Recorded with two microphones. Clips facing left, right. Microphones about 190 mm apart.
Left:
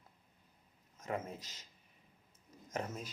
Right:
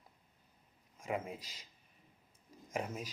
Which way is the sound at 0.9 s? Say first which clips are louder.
Right 1 dB; 10° right (ahead or behind).